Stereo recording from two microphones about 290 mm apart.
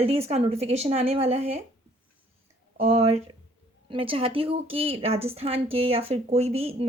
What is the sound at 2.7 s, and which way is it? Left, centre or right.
Speech, right.